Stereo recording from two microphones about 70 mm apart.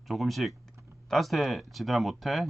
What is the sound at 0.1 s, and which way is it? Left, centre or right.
Speech, centre.